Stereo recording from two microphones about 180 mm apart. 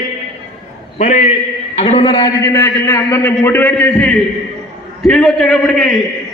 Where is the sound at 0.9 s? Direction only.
45° left (ahead or behind).